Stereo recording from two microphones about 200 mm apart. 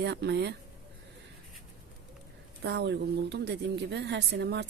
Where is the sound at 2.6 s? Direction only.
55° right (ahead or behind).